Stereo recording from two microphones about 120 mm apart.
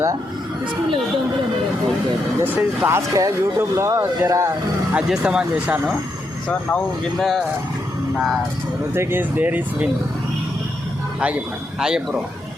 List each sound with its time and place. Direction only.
2.4 s speech: 20° right (ahead or behind)
4.9 s speech: 5° right (ahead or behind)
7.2 s speech: centre (ahead or behind)
9.0 s speech: 20° right (ahead or behind)
11.8 s speech: 5° right (ahead or behind)